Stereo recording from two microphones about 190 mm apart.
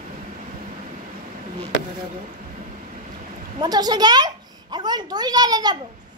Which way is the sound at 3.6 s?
20° right (ahead or behind).